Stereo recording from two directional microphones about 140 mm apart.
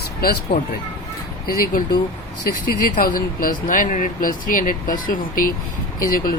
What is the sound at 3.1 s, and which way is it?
Speech, 85° left.